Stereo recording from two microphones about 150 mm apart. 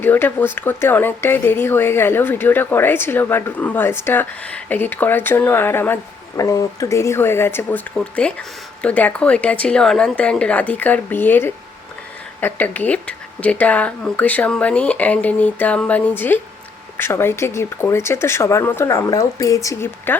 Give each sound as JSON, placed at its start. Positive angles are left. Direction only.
{"t": 0.0, "sound": "speech", "side_deg": 15}